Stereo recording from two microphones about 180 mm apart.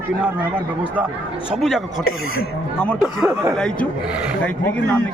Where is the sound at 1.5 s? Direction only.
Centre (ahead or behind).